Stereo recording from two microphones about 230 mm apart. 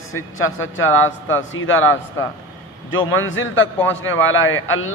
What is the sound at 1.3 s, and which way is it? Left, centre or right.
Speech, left.